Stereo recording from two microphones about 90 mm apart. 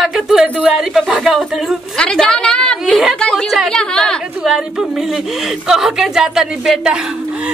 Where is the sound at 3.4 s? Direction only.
Centre (ahead or behind).